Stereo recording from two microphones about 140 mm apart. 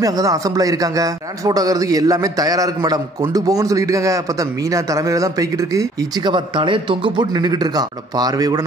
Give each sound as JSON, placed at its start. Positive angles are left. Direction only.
{"t": 0.0, "sound": "a man's voice", "side_deg": -25}